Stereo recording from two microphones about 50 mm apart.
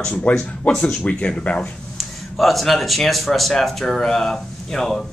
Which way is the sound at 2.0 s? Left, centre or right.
Centre.